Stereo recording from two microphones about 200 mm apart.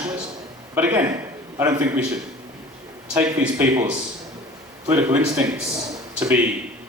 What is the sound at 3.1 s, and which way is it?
A man's voice, 10° right (ahead or behind).